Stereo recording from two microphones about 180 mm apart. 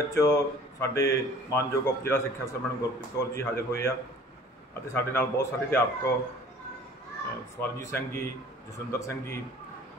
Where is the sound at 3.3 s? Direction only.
15° left (ahead or behind).